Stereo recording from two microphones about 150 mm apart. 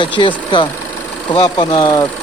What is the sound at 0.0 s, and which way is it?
Speech, 30° left (ahead or behind).